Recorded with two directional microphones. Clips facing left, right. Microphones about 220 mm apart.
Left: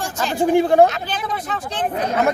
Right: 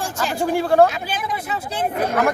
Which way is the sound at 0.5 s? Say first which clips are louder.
Left 2 dB; 20° left (ahead or behind).